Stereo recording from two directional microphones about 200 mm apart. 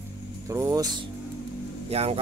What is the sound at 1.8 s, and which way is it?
Speech, 30° right (ahead or behind).